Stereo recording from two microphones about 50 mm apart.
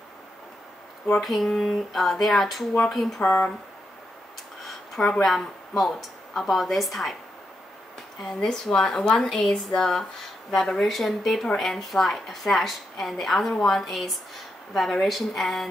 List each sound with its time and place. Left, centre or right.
1.2 s speech: centre
3.2 s speech: left
4.6 s a sound: centre
5.2 s speech: centre
8.2 s a woman's voice: centre